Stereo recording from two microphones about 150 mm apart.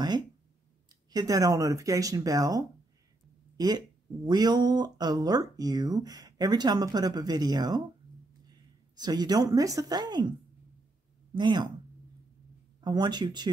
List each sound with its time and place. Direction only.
1.1 s a woman's voice: 25° right (ahead or behind)
11.3 s speech: 30° right (ahead or behind)
12.8 s speech: 30° right (ahead or behind)